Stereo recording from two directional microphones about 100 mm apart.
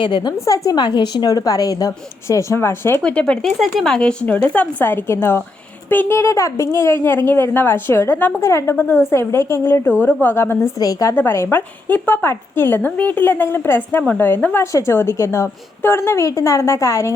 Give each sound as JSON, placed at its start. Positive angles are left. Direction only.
{"t": 0.0, "sound": "a woman's voice", "side_deg": 50}
{"t": 0.9, "sound": "a woman's voice", "side_deg": 50}
{"t": 3.0, "sound": "a woman's voice", "side_deg": 10}
{"t": 10.8, "sound": "a woman's voice", "side_deg": 35}
{"t": 11.1, "sound": "a woman's voice", "side_deg": 20}